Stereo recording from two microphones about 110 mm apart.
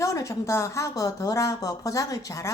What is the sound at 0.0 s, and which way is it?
A woman's voice, 30° left (ahead or behind).